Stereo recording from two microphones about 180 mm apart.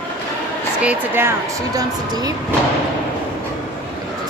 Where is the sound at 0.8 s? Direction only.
10° right (ahead or behind).